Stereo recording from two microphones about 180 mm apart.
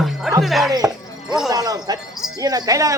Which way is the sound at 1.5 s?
20° right (ahead or behind).